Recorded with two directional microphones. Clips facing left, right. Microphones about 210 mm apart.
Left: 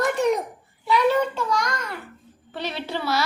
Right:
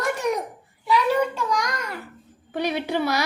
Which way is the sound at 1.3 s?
15° right (ahead or behind).